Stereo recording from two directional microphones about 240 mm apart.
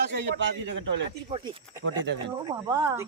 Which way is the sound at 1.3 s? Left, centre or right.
Centre.